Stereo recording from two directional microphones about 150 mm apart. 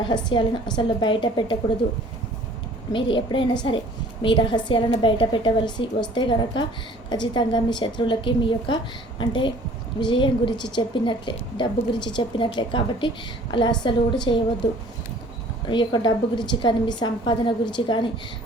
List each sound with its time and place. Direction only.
0.0 s a woman's voice: 30° left (ahead or behind)
2.9 s a woman's voice: 35° left (ahead or behind)
15.6 s a woman's voice: 30° left (ahead or behind)